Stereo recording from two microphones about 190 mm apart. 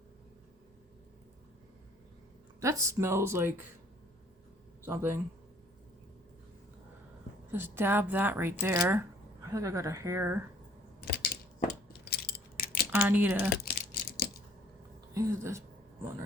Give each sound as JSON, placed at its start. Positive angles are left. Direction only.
{"t": 2.6, "sound": "speech", "side_deg": -15}
{"t": 4.8, "sound": "speech", "side_deg": -15}
{"t": 7.5, "sound": "speech", "side_deg": -10}
{"t": 11.0, "sound": "a sound", "side_deg": 50}
{"t": 12.9, "sound": "speech", "side_deg": -10}
{"t": 15.1, "sound": "speech", "side_deg": -15}